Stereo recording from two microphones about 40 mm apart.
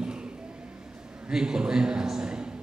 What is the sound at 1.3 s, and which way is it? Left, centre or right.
A man's voice, centre.